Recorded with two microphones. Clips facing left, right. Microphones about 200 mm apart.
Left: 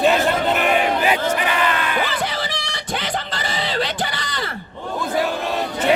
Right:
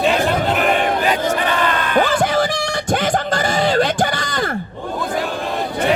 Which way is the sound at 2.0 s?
45° right (ahead or behind).